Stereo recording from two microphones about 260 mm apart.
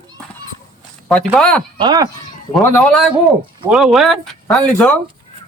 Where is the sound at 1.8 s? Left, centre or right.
Centre.